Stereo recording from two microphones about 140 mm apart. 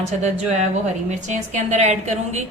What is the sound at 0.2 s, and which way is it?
A woman's voice, 55° right (ahead or behind).